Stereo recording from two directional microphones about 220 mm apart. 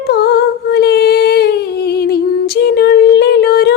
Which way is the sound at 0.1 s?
50° left (ahead or behind).